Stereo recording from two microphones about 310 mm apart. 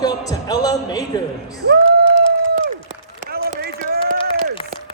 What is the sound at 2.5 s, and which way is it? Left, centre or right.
Run, right.